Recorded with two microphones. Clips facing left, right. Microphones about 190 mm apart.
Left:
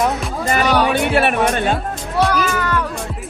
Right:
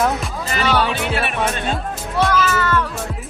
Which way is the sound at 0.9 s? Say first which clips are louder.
Left 6 dB; 55° left (ahead or behind).